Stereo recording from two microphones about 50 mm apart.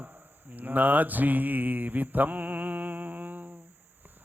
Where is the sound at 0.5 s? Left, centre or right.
Right.